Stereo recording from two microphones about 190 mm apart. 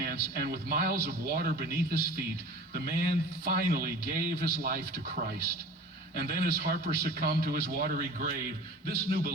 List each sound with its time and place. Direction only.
0.0 s a man's voice: 55° right (ahead or behind)
6.1 s a man's voice: 55° right (ahead or behind)